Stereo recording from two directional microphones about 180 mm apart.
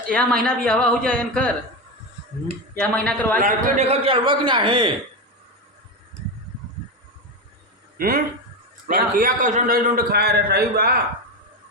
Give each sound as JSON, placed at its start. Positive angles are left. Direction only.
{"t": 0.1, "sound": "speech", "side_deg": 5}
{"t": 2.8, "sound": "a man's voice", "side_deg": 5}
{"t": 3.3, "sound": "a man's voice", "side_deg": -45}
{"t": 7.9, "sound": "a man's voice", "side_deg": -55}